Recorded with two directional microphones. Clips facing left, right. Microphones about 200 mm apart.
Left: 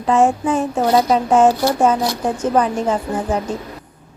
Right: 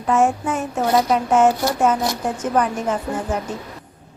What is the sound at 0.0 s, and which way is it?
Speech, 30° left (ahead or behind).